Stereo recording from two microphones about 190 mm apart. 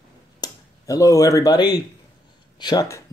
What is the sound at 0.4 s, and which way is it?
Speech, 20° left (ahead or behind).